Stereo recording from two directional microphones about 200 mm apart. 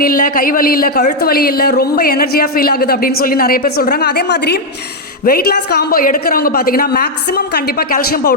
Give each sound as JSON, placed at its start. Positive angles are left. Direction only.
{"t": 0.0, "sound": "speech", "side_deg": 45}